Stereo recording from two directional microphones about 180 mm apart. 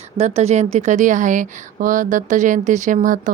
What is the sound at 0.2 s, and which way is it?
Speech, 35° right (ahead or behind).